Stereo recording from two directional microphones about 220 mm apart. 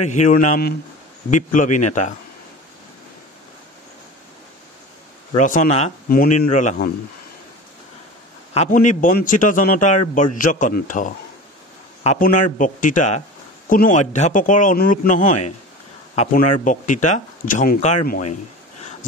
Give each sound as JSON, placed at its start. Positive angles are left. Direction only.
{"t": 0.0, "sound": "speech", "side_deg": 35}
{"t": 5.3, "sound": "speech", "side_deg": 35}
{"t": 8.5, "sound": "speech", "side_deg": 35}